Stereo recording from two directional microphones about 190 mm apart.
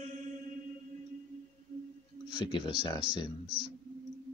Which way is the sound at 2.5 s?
25° left (ahead or behind).